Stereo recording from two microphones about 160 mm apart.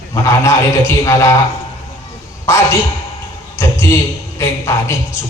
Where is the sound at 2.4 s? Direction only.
15° left (ahead or behind).